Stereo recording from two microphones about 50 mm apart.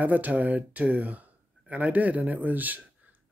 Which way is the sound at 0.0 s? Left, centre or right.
Right.